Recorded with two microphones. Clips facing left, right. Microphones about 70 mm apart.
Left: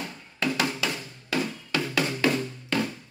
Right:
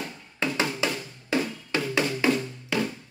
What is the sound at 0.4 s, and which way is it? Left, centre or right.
Music, right.